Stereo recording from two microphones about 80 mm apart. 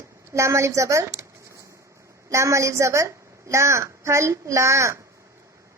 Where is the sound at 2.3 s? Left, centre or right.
Right.